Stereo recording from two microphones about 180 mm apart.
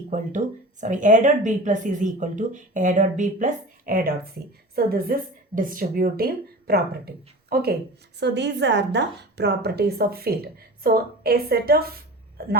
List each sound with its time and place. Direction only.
0.1 s a woman's voice: 45° right (ahead or behind); by 7.7 s 60° right (ahead or behind)
8.2 s a woman's voice: 75° right (ahead or behind)